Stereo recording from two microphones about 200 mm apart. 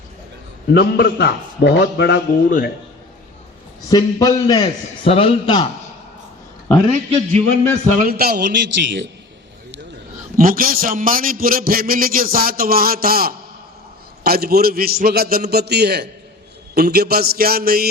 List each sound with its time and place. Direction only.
0.7 s a man's voice: 50° left (ahead or behind)
3.8 s a man's voice: 20° left (ahead or behind)
6.9 s a man's voice: 35° right (ahead or behind)
8.1 s a man's voice: 50° right (ahead or behind)
10.3 s a man's voice: 45° right (ahead or behind)